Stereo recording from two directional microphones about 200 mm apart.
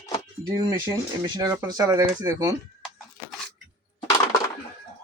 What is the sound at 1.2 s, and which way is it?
Speech, 20° right (ahead or behind).